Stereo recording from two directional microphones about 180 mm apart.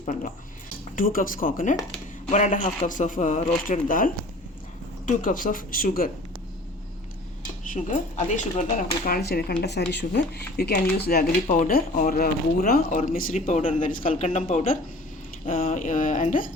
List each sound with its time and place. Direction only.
0.0 s speech: 40° left (ahead or behind)
7.7 s speech: 45° left (ahead or behind); by 11.3 s 60° left (ahead or behind)
11.4 s speech: 45° left (ahead or behind)